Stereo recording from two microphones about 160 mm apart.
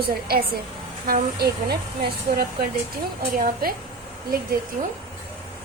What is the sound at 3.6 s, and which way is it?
Speech, 70° right (ahead or behind).